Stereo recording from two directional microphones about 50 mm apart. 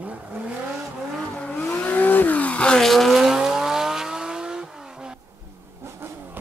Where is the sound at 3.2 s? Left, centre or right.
Centre.